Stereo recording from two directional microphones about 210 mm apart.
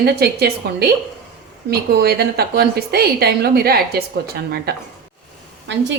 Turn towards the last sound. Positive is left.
turn(degrees=-60)  # may be behind; listen again after turning